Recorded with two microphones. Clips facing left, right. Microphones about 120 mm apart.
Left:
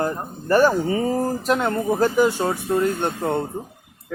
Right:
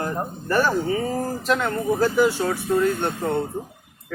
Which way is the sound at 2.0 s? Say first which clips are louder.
Left 1 dB; 20° left (ahead or behind).